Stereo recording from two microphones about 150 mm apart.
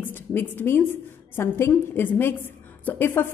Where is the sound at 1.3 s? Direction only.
15° left (ahead or behind).